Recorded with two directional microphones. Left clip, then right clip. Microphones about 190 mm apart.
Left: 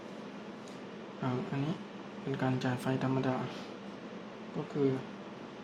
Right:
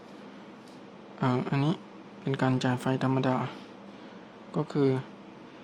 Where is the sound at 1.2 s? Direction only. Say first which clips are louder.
Right 8 dB; 40° right (ahead or behind).